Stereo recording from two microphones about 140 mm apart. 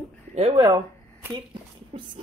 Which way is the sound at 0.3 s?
45° right (ahead or behind).